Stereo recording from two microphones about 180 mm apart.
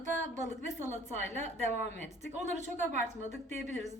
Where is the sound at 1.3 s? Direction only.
40° right (ahead or behind).